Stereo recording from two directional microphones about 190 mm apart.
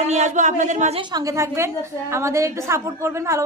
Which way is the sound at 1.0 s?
20° right (ahead or behind).